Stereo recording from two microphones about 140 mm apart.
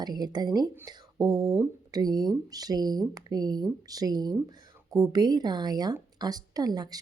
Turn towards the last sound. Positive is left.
turn(degrees=-30)  # may be behind; listen again after turning